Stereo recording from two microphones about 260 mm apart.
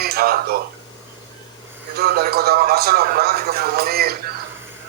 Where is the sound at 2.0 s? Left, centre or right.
Right.